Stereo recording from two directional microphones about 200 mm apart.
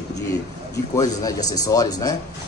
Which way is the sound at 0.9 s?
20° left (ahead or behind).